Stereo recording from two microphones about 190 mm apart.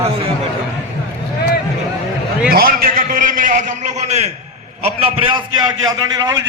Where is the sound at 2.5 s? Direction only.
50° right (ahead or behind).